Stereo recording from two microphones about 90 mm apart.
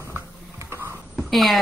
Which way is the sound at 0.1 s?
30° right (ahead or behind).